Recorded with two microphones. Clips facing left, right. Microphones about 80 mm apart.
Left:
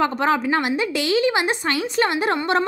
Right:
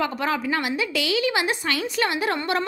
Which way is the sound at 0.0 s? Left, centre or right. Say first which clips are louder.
Left 5 dB; left.